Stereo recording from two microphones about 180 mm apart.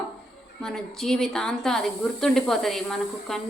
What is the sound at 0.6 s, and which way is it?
Speech, centre (ahead or behind).